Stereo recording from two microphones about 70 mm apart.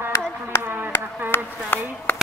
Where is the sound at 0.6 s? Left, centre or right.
Right.